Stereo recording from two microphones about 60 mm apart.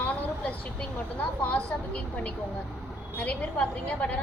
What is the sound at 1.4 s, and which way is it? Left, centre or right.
Speech, left.